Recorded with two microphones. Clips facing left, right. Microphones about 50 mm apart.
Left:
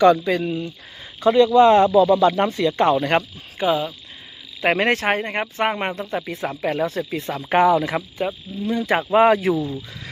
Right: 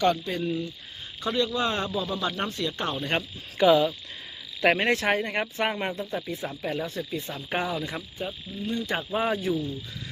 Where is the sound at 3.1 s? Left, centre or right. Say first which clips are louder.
Left 9 dB; left.